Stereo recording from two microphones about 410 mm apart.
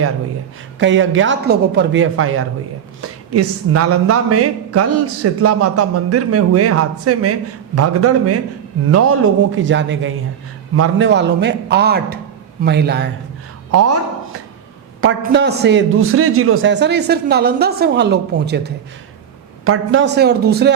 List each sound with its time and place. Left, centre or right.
0.8 s a man's voice: right
13.7 s a woman's voice: right
15.0 s a man's voice: right